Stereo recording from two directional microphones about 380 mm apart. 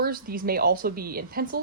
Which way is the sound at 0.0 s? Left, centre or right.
Right.